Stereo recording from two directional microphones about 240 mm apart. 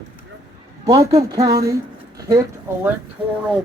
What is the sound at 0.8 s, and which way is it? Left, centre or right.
Speech, centre.